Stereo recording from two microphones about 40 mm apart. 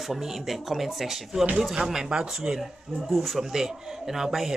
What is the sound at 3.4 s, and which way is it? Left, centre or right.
Speech, centre.